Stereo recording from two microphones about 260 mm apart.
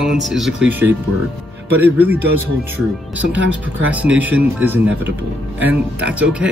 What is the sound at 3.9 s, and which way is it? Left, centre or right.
Speech, centre.